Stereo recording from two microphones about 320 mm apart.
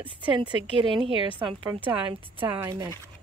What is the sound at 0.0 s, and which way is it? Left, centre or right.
Speech, centre.